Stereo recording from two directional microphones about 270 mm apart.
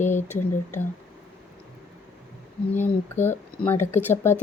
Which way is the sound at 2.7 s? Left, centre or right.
Centre.